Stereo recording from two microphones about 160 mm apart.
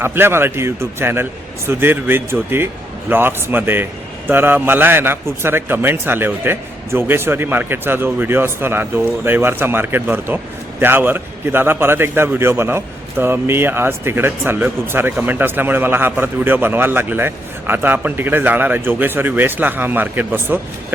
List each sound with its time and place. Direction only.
0.0 s a man's voice: 15° right (ahead or behind)